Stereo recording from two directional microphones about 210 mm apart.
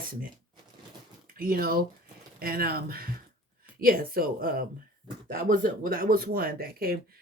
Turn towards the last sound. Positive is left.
turn(degrees=-45)  # may be behind; listen again after turning